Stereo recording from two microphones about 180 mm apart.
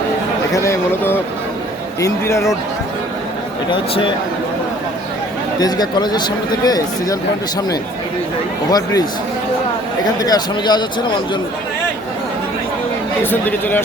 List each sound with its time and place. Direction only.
0.5 s a man's voice: 15° left (ahead or behind)
3.7 s speech: 25° left (ahead or behind)
5.5 s speech: 20° left (ahead or behind)
8.7 s speech: 20° left (ahead or behind)
10.2 s speech: 20° left (ahead or behind)
13.3 s a man's voice: 10° left (ahead or behind)